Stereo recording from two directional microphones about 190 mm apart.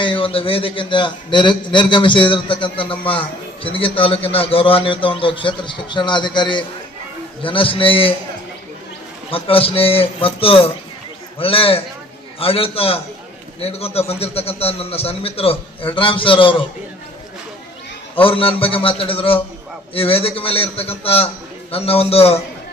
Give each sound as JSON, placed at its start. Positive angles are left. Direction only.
{"t": 0.0, "sound": "a man's voice", "side_deg": 25}
{"t": 9.3, "sound": "a man's voice", "side_deg": 30}
{"t": 18.1, "sound": "a man's voice", "side_deg": 30}